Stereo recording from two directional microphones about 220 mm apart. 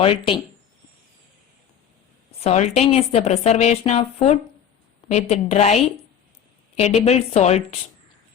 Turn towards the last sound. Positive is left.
turn(degrees=30)  # may be behind; listen again after turning